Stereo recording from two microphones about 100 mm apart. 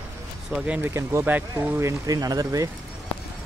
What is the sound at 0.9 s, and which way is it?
Speech, 25° right (ahead or behind).